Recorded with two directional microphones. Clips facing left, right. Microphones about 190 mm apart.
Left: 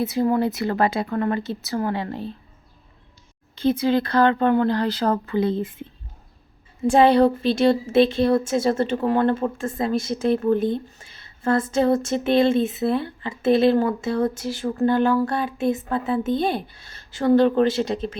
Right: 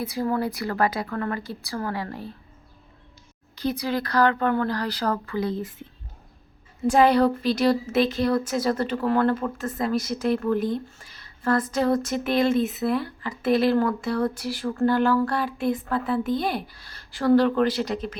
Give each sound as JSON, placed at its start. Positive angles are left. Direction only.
{"t": 0.0, "sound": "a woman's voice", "side_deg": 25}
{"t": 3.5, "sound": "a woman's voice", "side_deg": 25}
{"t": 6.8, "sound": "a woman's voice", "side_deg": 30}